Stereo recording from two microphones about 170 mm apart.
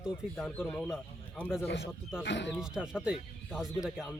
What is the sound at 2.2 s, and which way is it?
Speech, 90° left.